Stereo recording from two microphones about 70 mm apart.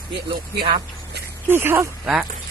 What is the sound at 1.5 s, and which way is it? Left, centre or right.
Speech, right.